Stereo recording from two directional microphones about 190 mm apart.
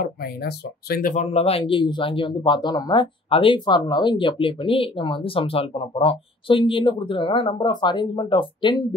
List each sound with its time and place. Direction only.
0.0 s speech: 55° left (ahead or behind)
1.2 s speech: 30° left (ahead or behind)